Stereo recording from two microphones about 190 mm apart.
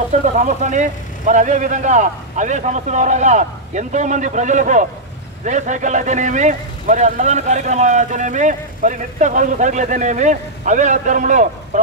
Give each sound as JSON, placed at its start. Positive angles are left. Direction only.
{"t": 0.4, "sound": "a man's voice", "side_deg": -40}